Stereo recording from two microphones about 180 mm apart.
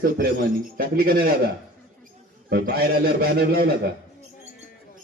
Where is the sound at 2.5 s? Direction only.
60° right (ahead or behind).